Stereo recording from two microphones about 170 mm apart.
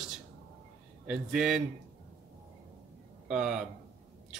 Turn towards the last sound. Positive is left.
turn(degrees=-5)  # may be behind; listen again after turning